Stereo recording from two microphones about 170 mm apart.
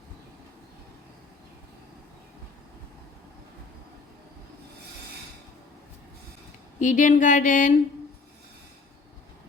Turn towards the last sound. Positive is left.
turn(degrees=50)  # may be behind; listen again after turning